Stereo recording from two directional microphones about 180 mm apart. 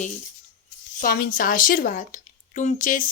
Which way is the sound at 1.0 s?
55° left (ahead or behind).